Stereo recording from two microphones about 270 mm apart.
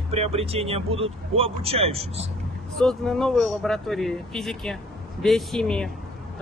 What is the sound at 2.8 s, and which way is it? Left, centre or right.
Speech, centre.